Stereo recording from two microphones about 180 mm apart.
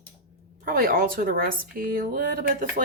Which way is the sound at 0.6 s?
55° right (ahead or behind).